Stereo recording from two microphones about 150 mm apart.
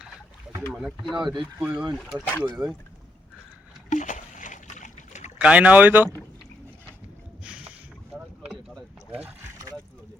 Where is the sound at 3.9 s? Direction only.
55° left (ahead or behind).